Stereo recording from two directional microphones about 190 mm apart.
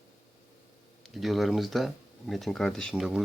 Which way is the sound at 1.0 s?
Centre (ahead or behind).